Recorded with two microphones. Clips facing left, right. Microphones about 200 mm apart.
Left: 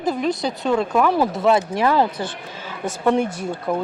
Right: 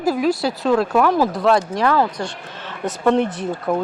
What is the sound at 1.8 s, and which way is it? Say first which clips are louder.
Speech: even; 20° left (ahead or behind).